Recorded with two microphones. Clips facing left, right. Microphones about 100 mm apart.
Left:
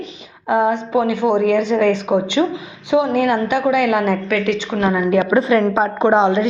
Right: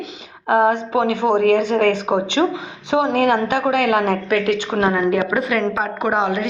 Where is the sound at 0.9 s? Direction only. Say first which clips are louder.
Left 1 dB; 20° right (ahead or behind).